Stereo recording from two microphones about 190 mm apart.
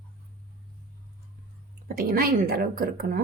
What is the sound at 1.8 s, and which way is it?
A woman's voice, 50° right (ahead or behind).